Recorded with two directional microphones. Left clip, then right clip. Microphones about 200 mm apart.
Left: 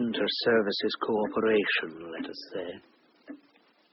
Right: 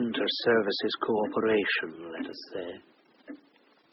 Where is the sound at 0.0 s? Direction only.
20° left (ahead or behind).